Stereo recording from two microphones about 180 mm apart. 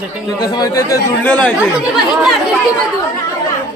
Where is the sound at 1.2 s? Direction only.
5° left (ahead or behind).